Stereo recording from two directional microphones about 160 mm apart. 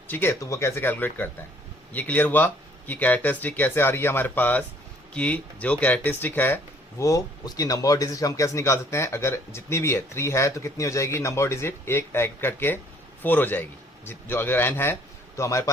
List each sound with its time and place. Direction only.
0.1 s a man's voice: 15° left (ahead or behind)